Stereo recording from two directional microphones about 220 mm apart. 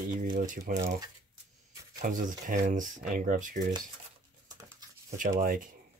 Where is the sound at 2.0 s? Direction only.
35° right (ahead or behind).